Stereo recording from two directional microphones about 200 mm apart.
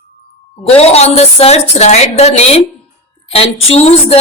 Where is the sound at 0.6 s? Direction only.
30° left (ahead or behind).